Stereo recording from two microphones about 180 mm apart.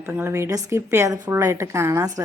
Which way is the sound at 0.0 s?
10° right (ahead or behind).